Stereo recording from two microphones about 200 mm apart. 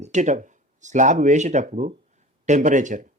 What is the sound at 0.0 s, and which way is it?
Speech, 35° right (ahead or behind).